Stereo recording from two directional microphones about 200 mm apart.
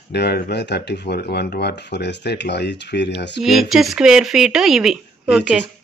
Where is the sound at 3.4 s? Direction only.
Centre (ahead or behind).